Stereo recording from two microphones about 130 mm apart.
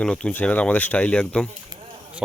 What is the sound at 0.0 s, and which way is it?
Speech, 5° left (ahead or behind).